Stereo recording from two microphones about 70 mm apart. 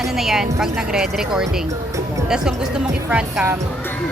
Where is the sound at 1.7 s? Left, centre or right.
Right.